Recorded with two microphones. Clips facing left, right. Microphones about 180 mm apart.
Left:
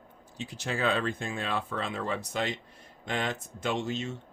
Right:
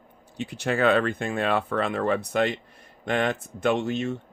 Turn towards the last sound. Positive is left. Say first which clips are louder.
# right 6 dB
turn(degrees=-60)  # may be behind; listen again after turning